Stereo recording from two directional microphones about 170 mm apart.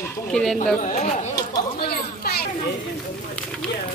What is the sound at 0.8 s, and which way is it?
Speech, 45° left (ahead or behind).